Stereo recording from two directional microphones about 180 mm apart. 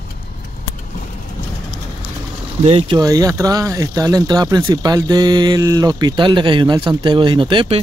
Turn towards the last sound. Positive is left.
turn(degrees=-25)  # may be behind; listen again after turning